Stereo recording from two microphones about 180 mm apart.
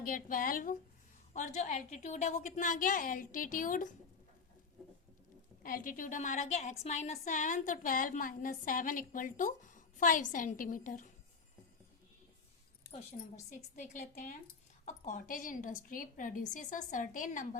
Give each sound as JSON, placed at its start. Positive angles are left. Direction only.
{"t": 0.0, "sound": "a woman's voice", "side_deg": 50}
{"t": 5.6, "sound": "a woman's voice", "side_deg": 50}
{"t": 13.1, "sound": "a woman's voice", "side_deg": 35}